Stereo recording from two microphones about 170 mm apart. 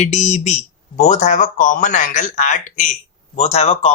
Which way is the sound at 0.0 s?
40° left (ahead or behind).